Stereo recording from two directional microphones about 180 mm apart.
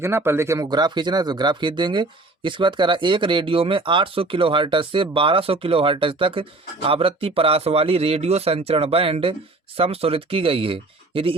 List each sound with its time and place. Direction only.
0.0 s speech: 15° right (ahead or behind); by 11.3 s 30° right (ahead or behind)